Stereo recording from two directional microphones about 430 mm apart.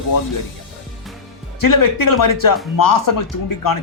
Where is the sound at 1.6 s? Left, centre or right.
Left.